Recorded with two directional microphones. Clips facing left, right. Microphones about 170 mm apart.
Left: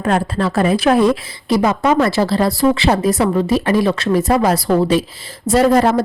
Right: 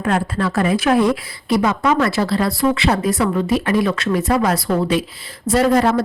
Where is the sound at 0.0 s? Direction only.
30° left (ahead or behind).